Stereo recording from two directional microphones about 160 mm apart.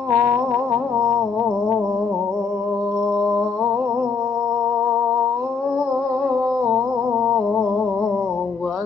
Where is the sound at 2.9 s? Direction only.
5° right (ahead or behind).